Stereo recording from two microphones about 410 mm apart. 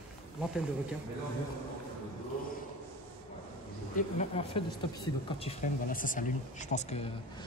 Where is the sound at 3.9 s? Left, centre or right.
Centre.